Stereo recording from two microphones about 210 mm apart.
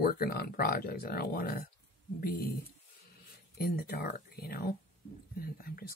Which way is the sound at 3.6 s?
45° left (ahead or behind).